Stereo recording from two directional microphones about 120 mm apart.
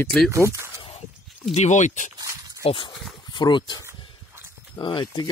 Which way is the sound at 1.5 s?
75° left (ahead or behind).